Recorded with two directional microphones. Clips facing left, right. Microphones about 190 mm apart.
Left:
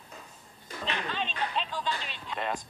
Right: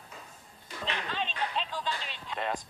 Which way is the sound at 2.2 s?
30° right (ahead or behind).